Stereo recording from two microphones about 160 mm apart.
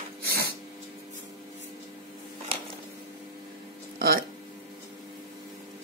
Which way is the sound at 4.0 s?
70° right (ahead or behind).